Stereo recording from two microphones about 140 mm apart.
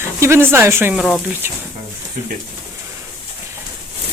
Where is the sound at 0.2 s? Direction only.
20° right (ahead or behind).